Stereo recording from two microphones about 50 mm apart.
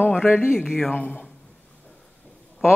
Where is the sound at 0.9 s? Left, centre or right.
Left.